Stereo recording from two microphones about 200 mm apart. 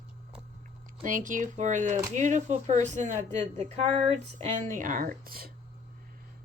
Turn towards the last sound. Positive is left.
turn(degrees=-45)  # may be behind; listen again after turning